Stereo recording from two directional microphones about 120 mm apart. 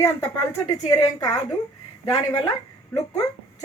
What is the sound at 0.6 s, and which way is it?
Speech, 30° left (ahead or behind).